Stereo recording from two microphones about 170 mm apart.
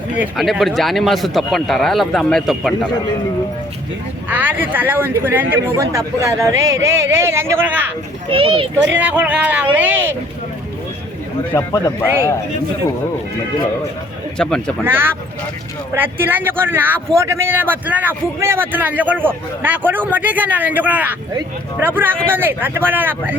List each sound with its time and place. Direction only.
0.2 s speech: 5° right (ahead or behind)
4.3 s speech: 10° right (ahead or behind)
8.3 s speech: 30° right (ahead or behind)
8.9 s speech: 10° right (ahead or behind)
11.5 s a man's voice: 20° left (ahead or behind)
14.3 s speech: 5° left (ahead or behind)
14.8 s speech: 15° right (ahead or behind)